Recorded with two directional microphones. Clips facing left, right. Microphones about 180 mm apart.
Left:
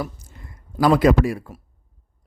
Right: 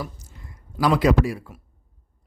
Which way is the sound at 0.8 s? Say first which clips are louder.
Left 3 dB; 50° left (ahead or behind).